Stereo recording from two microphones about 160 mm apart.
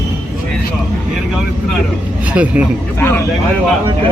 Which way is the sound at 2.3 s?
10° right (ahead or behind).